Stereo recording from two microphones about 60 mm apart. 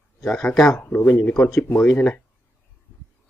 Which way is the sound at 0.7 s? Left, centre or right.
Left.